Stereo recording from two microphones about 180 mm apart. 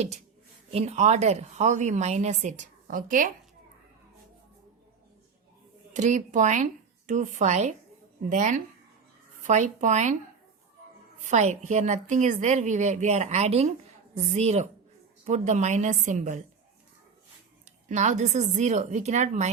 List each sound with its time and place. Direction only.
0.7 s speech: 35° right (ahead or behind)
5.9 s speech: 40° right (ahead or behind)
11.2 s speech: 40° right (ahead or behind)
17.7 s speech: 40° right (ahead or behind)